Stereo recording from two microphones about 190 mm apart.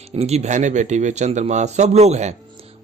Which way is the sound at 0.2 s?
35° right (ahead or behind).